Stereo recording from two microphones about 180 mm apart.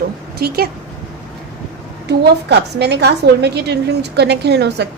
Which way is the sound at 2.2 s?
65° right (ahead or behind).